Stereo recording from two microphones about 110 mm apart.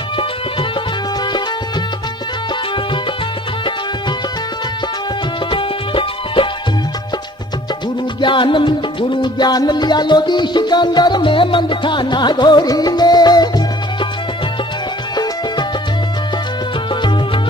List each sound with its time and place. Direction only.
5.5 s music: 50° left (ahead or behind)
8.2 s music: 50° left (ahead or behind)